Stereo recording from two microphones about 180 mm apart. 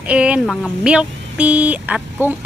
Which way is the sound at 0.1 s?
5° right (ahead or behind).